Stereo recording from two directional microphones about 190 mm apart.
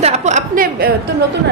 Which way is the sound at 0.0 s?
35° right (ahead or behind).